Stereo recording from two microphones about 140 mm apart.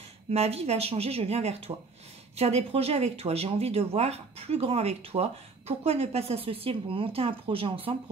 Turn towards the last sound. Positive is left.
turn(degrees=-40)  # may be behind; listen again after turning